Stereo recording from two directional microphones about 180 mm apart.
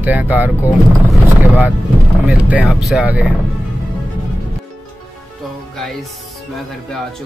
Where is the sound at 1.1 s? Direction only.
10° right (ahead or behind).